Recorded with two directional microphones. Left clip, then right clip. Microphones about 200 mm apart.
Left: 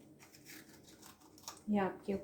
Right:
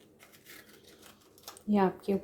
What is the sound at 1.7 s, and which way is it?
Speech, 40° right (ahead or behind).